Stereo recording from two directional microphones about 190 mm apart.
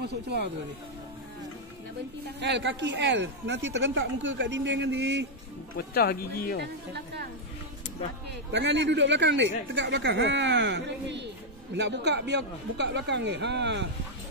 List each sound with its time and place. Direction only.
0.0 s speech: 60° right (ahead or behind)
2.4 s speech: 70° right (ahead or behind)
5.8 s speech: 55° left (ahead or behind)
6.6 s speech: 60° right (ahead or behind)
8.5 s speech: 70° right (ahead or behind)